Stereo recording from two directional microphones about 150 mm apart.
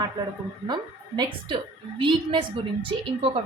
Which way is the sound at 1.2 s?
35° right (ahead or behind).